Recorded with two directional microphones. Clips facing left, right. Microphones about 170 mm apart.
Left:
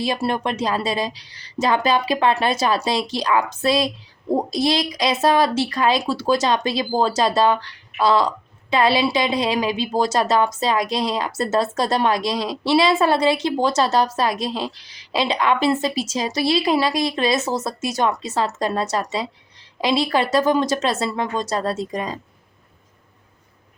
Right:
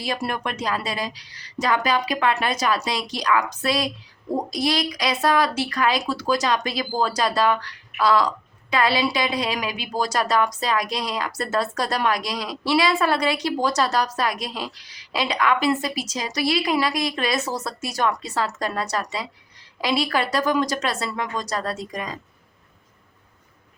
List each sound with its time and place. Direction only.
0.0 s speech: 25° left (ahead or behind)